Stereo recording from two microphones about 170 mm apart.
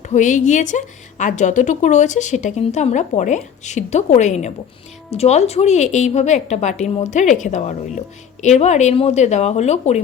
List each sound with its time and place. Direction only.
0.1 s a woman's voice: 45° left (ahead or behind)